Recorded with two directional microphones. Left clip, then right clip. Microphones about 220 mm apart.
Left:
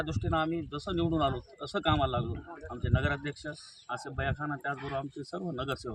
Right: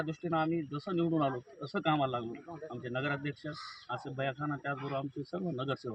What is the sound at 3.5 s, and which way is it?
Speech, centre (ahead or behind).